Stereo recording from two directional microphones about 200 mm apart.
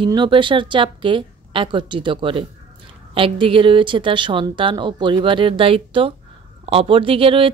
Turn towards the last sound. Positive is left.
turn(degrees=-25)  # may be behind; listen again after turning